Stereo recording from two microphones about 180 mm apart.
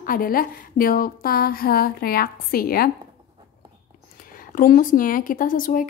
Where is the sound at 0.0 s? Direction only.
55° left (ahead or behind).